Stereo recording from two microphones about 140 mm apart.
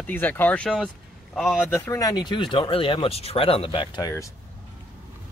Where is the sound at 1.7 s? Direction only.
20° left (ahead or behind).